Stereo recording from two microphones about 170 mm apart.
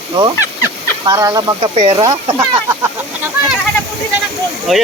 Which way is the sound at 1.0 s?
20° right (ahead or behind).